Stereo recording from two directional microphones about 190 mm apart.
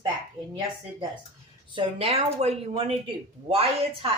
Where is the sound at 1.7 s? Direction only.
30° right (ahead or behind).